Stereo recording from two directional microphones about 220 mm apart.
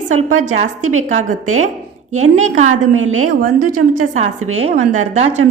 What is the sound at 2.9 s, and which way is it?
Speech, 70° right (ahead or behind).